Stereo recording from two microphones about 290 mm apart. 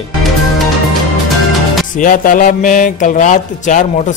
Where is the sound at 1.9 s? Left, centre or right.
Left.